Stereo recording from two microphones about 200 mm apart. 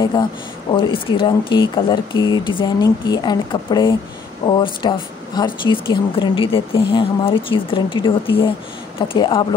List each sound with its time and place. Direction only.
0.7 s speech: 25° left (ahead or behind)